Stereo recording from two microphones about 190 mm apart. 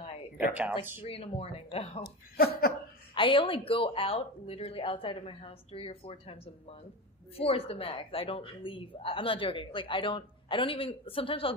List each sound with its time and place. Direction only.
1.0 s speech: 30° left (ahead or behind)
2.0 s speech: 55° left (ahead or behind)
3.2 s a woman's voice: 25° left (ahead or behind)